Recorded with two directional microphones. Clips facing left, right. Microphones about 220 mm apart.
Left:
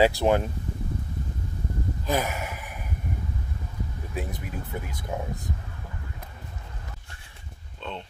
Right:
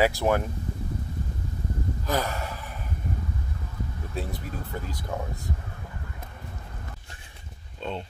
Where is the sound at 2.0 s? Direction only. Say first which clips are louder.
Left 1 dB; 20° left (ahead or behind).